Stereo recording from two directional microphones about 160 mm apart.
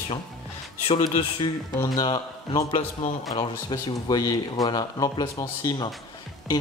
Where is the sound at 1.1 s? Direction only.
30° left (ahead or behind).